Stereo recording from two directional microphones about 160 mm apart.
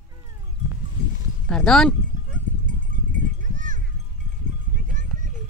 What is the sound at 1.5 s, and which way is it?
Sheep, 5° left (ahead or behind).